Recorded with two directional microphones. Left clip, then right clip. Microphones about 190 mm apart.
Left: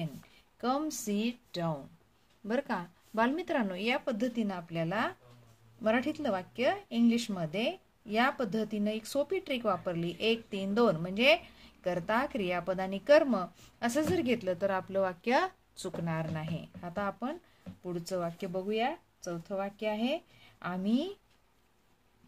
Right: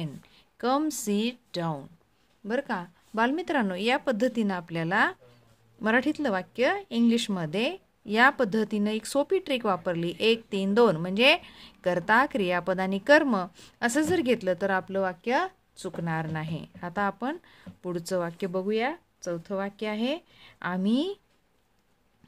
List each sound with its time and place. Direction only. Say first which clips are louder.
0.6 s speech: right 6 dB; 50° right (ahead or behind)
2.4 s speech: right 4 dB; 25° right (ahead or behind)
16.0 s speech: right 6 dB; 40° right (ahead or behind)